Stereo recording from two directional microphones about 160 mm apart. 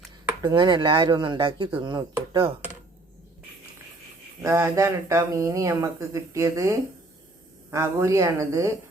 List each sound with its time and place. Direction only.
0.4 s speech: 25° right (ahead or behind)
4.4 s speech: 15° right (ahead or behind)